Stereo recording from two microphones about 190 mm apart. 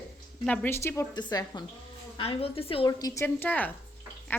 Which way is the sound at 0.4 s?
10° left (ahead or behind).